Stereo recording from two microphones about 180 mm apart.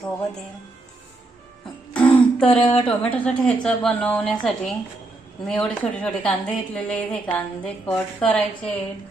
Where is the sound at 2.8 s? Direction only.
5° left (ahead or behind).